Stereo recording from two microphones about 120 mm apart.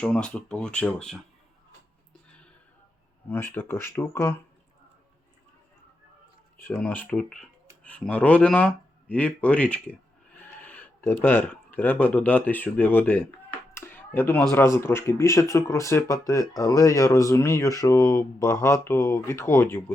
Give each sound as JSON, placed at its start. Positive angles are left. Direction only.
{"t": 0.0, "sound": "speech", "side_deg": 10}
{"t": 3.2, "sound": "speech", "side_deg": 15}
{"t": 6.6, "sound": "speech", "side_deg": 15}
{"t": 13.7, "sound": "a sound", "side_deg": 20}
{"t": 14.5, "sound": "speech", "side_deg": 20}